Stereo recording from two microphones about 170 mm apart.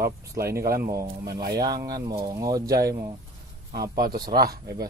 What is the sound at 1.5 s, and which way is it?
Speech, 25° right (ahead or behind).